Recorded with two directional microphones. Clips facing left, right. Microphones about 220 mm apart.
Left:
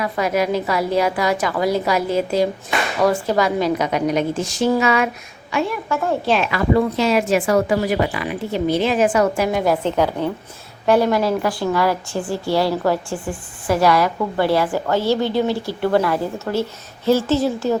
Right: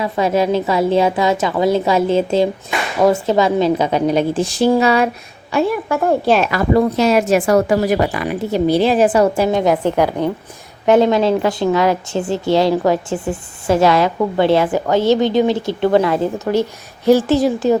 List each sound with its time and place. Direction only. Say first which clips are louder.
0.0 s a woman's voice: right 3 dB; 25° right (ahead or behind)